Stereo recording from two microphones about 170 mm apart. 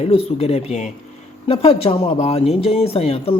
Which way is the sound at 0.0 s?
35° left (ahead or behind).